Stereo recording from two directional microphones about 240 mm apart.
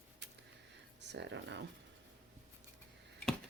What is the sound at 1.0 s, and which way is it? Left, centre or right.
Speech, right.